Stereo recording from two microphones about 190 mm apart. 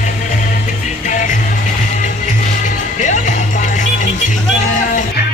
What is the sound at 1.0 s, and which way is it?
Music, 40° left (ahead or behind).